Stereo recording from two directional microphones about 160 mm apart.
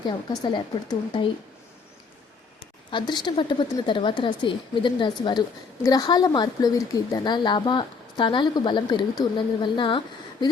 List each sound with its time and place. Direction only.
0.1 s speech: 30° left (ahead or behind)
2.9 s a woman's voice: 30° left (ahead or behind)